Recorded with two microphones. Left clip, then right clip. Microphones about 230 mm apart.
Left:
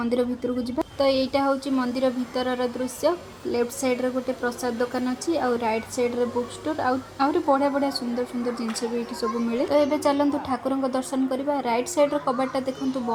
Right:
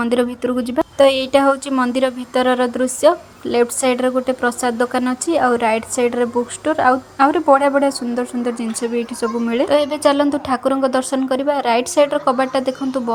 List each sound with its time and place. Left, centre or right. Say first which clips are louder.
0.0 s a woman's voice: right 7 dB; right
9.2 s a woman's voice: right 7 dB; right